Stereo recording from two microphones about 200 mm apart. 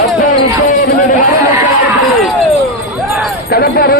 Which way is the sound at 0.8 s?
45° left (ahead or behind).